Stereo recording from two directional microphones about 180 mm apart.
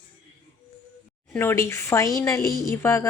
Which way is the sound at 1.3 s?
15° left (ahead or behind).